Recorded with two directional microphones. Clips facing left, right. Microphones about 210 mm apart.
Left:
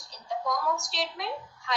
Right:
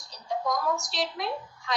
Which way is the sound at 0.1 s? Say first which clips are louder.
Right 2 dB; 40° right (ahead or behind).